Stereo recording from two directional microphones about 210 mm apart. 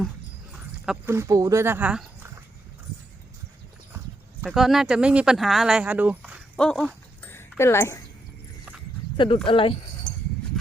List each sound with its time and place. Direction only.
0.9 s speech: 10° right (ahead or behind)
4.4 s speech: centre (ahead or behind)
6.6 s a sound: 5° left (ahead or behind)
9.1 s speech: 25° left (ahead or behind)